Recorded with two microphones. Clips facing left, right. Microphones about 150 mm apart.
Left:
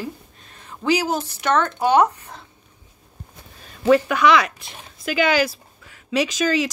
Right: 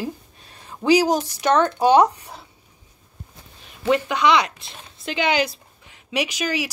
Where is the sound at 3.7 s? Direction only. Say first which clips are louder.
Left 4 dB; 20° right (ahead or behind).